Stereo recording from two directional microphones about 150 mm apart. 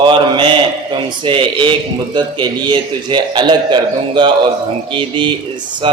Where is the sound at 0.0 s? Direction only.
35° right (ahead or behind).